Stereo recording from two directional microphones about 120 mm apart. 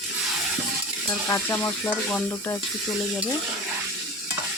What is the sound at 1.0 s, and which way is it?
Frying, 20° left (ahead or behind).